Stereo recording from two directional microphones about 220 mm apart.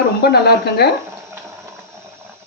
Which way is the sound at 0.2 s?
45° left (ahead or behind).